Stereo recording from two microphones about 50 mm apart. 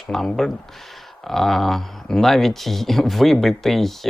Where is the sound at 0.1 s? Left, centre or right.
Centre.